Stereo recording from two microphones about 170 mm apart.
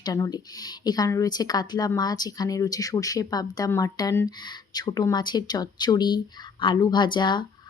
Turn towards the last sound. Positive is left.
turn(degrees=25)  # may be behind; listen again after turning